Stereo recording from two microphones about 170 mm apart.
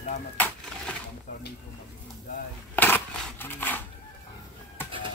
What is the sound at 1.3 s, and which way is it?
Speech, 50° left (ahead or behind).